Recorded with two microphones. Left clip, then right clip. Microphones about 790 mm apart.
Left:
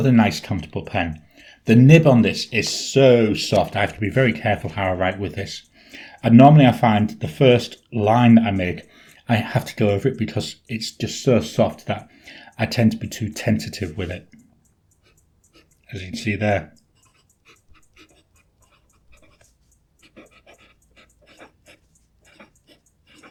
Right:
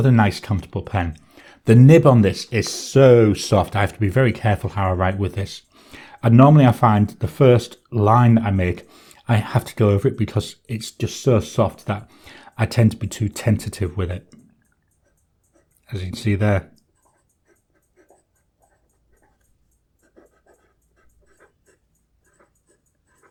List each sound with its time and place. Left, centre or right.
0.0 s speech: right
15.9 s speech: right